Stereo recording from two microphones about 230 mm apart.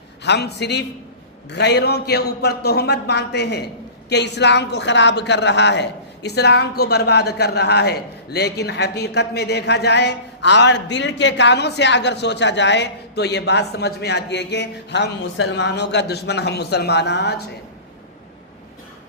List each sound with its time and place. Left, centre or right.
0.2 s a man's voice: left